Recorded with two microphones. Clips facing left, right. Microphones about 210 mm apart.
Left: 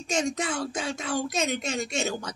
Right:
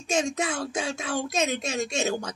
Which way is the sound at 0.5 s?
10° right (ahead or behind).